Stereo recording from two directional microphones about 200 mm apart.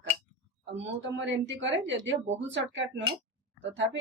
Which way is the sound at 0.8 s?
65° right (ahead or behind).